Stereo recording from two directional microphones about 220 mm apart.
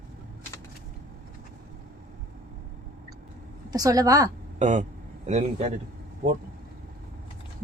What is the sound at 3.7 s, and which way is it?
Speech, 15° right (ahead or behind).